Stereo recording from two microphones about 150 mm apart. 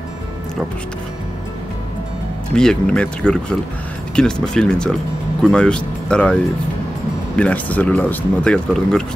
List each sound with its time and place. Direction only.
2.5 s speech: 5° left (ahead or behind)